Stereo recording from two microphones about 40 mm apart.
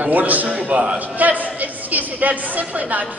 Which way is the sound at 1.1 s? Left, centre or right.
Right.